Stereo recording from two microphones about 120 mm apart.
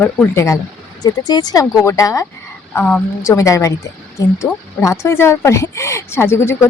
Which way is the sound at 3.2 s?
25° left (ahead or behind).